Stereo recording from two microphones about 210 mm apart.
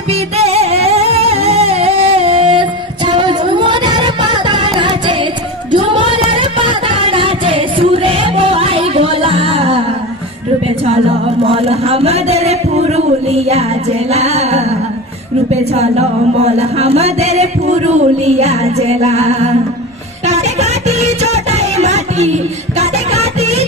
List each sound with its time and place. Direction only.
0.1 s music: 30° right (ahead or behind)
10.9 s a sound: 25° right (ahead or behind)
15.5 s music: 30° right (ahead or behind)